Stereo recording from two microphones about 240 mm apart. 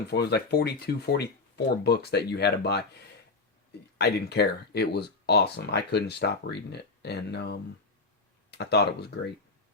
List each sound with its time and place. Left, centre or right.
0.1 s speech: left
3.9 s speech: left